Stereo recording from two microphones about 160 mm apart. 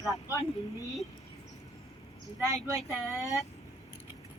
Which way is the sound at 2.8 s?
Centre (ahead or behind).